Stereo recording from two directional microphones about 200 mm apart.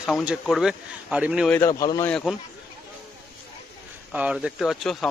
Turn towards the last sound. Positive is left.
turn(degrees=0)  # may be behind; listen again after turning